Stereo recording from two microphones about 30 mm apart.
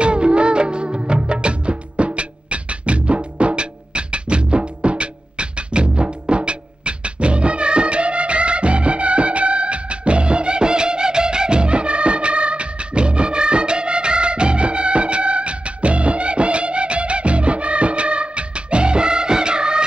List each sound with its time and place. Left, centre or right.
0.0 s music: right